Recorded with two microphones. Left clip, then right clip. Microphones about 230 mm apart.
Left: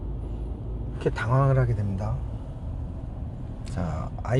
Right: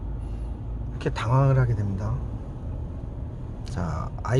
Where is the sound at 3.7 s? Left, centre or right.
Centre.